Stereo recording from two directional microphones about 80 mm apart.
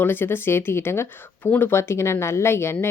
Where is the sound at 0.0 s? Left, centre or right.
Left.